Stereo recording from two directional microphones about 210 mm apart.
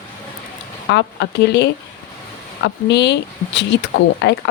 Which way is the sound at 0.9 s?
55° left (ahead or behind).